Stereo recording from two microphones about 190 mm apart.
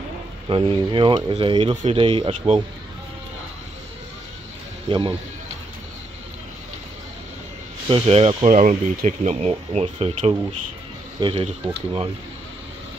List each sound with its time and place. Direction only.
0.5 s speech: 25° right (ahead or behind)
4.8 s speech: 25° right (ahead or behind)
7.9 s speech: 30° right (ahead or behind)
8.5 s speech: 40° right (ahead or behind)